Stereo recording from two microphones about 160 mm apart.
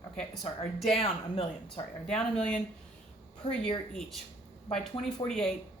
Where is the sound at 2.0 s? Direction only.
5° left (ahead or behind).